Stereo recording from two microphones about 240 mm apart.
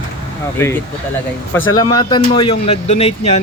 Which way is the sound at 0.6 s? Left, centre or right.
Centre.